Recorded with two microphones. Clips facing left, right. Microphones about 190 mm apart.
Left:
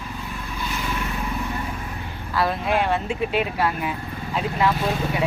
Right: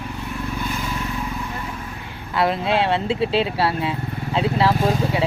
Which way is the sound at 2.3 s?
25° right (ahead or behind).